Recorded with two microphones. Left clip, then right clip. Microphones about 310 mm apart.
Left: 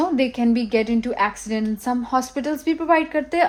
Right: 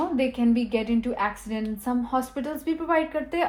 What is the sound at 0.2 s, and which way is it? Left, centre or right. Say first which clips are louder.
A woman's voice: left 3 dB; left.